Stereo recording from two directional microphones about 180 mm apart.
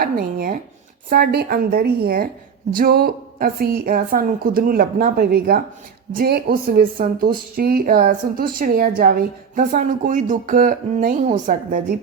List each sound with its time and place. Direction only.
0.0 s a woman's voice: 55° right (ahead or behind)